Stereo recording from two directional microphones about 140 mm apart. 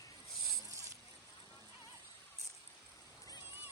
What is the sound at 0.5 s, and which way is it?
Zipper, 25° right (ahead or behind).